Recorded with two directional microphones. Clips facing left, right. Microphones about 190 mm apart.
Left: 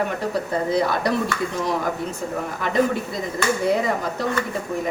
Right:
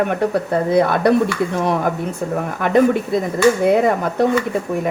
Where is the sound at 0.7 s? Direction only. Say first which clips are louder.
Right 8 dB; 60° right (ahead or behind).